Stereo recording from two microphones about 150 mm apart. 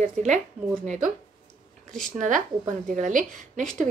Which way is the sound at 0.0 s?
55° right (ahead or behind).